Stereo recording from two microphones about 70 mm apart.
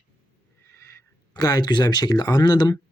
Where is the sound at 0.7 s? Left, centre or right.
Left.